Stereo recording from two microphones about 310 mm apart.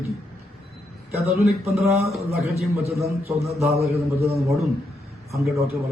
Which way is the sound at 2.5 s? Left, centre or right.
Centre.